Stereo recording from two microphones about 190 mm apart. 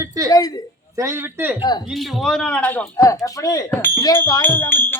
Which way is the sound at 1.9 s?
Centre (ahead or behind).